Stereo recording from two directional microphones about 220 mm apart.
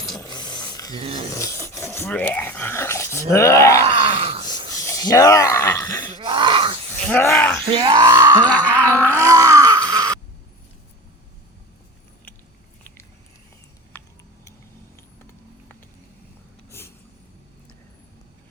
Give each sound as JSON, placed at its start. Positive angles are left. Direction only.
{"t": 0.2, "sound": "a sound", "side_deg": 20}
{"t": 0.9, "sound": "speech", "side_deg": -25}
{"t": 1.4, "sound": "speech", "side_deg": 15}
{"t": 3.9, "sound": "wail", "side_deg": -25}
{"t": 4.9, "sound": "speech", "side_deg": 15}
{"t": 6.1, "sound": "groan", "side_deg": -20}
{"t": 7.0, "sound": "speech", "side_deg": 5}
{"t": 7.8, "sound": "speech", "side_deg": -20}
{"t": 8.4, "sound": "a sound", "side_deg": 5}
{"t": 9.2, "sound": "groan", "side_deg": -15}
{"t": 13.9, "sound": "a sound", "side_deg": 10}